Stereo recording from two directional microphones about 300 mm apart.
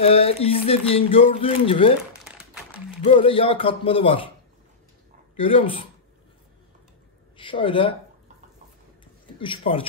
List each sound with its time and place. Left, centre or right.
0.0 s speech: centre
3.0 s a man's voice: centre
5.3 s a man's voice: centre
7.3 s speech: centre
9.0 s a sound: centre
9.6 s a man's voice: centre